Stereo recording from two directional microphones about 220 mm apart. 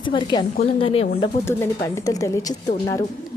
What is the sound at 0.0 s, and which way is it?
A woman's voice, 20° left (ahead or behind).